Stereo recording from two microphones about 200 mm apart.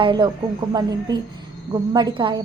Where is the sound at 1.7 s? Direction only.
20° right (ahead or behind).